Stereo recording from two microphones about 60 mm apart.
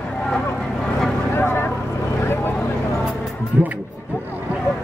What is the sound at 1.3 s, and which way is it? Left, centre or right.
Vehicle, left.